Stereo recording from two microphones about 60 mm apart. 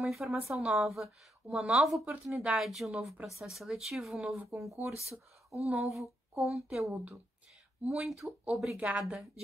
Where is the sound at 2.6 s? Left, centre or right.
Centre.